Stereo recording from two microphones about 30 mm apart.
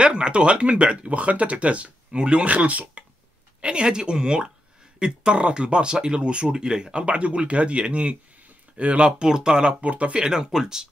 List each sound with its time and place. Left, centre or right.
0.0 s speech: right
2.1 s speech: right
2.4 s speech: right
3.6 s speech: right
7.2 s speech: right
9.2 s speech: right
9.8 s speech: right
10.1 s speech: right